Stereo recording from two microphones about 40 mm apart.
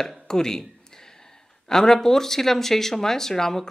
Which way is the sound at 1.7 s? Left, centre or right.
Centre.